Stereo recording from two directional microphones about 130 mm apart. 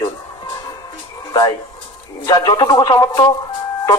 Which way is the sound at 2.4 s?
35° left (ahead or behind).